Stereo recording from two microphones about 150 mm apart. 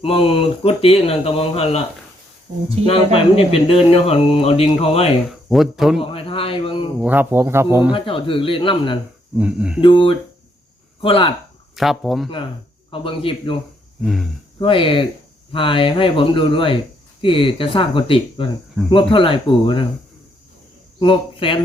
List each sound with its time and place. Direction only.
0.0 s speech: 40° left (ahead or behind)
2.8 s speech: 40° left (ahead or behind)
5.3 s speech: centre (ahead or behind)
6.0 s speech: 35° left (ahead or behind)
7.0 s speech: 10° right (ahead or behind)
7.9 s speech: 35° left (ahead or behind)
9.4 s speech: 10° right (ahead or behind)
9.8 s speech: 35° left (ahead or behind)
11.8 s speech: centre (ahead or behind)
12.9 s speech: 35° left (ahead or behind)
14.0 s speech: centre (ahead or behind)
14.6 s speech: 35° left (ahead or behind)
21.0 s speech: 35° left (ahead or behind)